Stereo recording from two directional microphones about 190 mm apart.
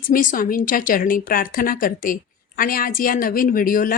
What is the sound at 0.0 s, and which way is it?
Speech, 45° left (ahead or behind).